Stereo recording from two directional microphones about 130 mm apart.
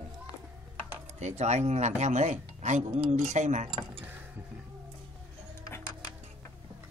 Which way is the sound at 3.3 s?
65° right (ahead or behind).